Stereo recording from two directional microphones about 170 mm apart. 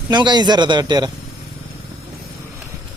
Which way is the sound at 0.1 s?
25° right (ahead or behind).